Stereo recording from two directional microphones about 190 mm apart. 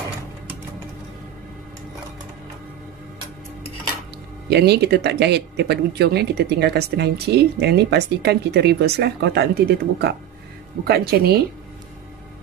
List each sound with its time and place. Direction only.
4.5 s speech: 60° right (ahead or behind)